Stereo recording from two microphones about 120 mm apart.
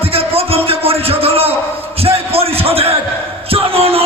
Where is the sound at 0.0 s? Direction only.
55° right (ahead or behind).